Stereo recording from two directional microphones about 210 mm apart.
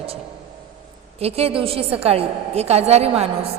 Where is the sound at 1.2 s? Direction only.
30° right (ahead or behind).